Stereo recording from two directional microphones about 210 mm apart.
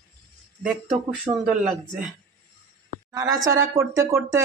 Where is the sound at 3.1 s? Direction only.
15° right (ahead or behind).